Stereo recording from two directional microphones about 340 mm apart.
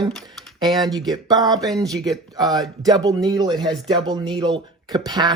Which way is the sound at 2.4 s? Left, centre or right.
Centre.